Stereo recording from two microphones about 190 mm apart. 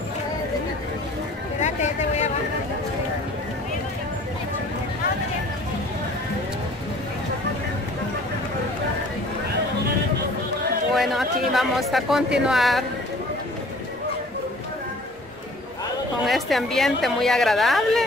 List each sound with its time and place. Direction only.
1.6 s a sound: 35° left (ahead or behind)
11.0 s speech: centre (ahead or behind)
16.3 s speech: centre (ahead or behind)